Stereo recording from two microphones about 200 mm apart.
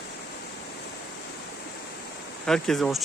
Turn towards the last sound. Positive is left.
turn(degrees=0)  # may be behind; listen again after turning